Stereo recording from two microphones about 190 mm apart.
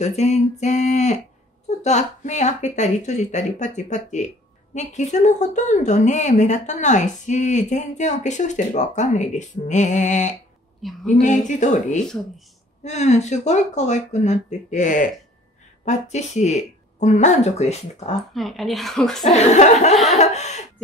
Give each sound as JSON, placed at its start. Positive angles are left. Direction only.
{"t": 0.0, "sound": "speech", "side_deg": 35}
{"t": 18.3, "sound": "speech", "side_deg": 0}
{"t": 19.3, "sound": "speech", "side_deg": 35}
{"t": 20.1, "sound": "laughter", "side_deg": 35}